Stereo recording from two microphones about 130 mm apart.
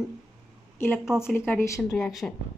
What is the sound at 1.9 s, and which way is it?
Speech, centre (ahead or behind).